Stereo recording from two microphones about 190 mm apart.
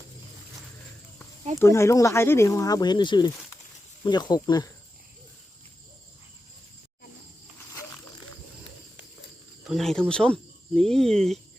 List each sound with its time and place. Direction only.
1.5 s speech: 15° left (ahead or behind)
9.6 s speech: centre (ahead or behind)